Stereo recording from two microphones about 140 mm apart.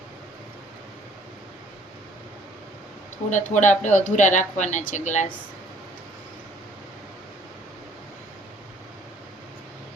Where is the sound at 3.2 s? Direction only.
60° left (ahead or behind).